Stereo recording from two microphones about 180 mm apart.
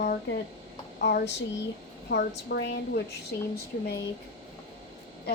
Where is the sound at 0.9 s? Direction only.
65° left (ahead or behind).